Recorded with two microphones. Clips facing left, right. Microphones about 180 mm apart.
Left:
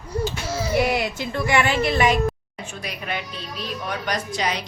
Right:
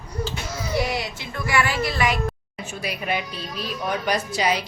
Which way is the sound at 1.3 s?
25° left (ahead or behind).